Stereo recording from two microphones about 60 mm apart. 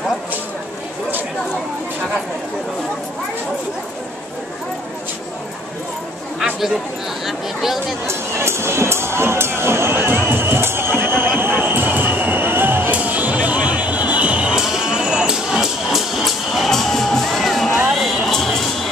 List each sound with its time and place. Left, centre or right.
7.2 s speech: centre
8.1 s music: right; by 18.3 s centre
18.3 s music: centre